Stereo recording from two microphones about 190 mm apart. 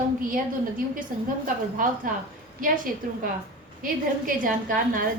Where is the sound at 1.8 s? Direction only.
45° right (ahead or behind).